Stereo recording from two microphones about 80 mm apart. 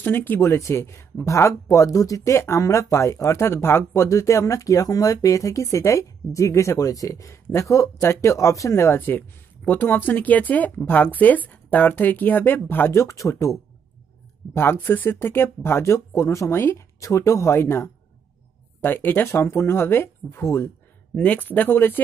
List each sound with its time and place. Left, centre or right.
0.0 s speech: left
8.9 s speech: left
13.0 s speech: left
21.1 s speech: centre